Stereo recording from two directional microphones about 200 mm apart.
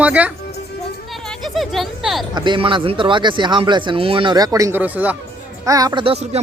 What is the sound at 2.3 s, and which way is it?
Speech, 25° right (ahead or behind).